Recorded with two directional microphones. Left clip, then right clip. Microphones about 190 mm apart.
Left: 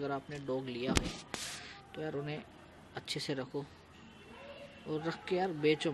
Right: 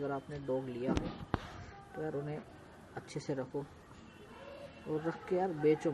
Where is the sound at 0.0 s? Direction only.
20° left (ahead or behind).